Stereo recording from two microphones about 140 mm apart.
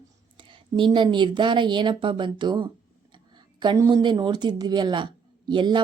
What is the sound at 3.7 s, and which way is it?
A woman's voice, 30° right (ahead or behind).